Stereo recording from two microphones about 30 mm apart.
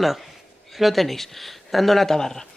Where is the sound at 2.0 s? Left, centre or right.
Centre.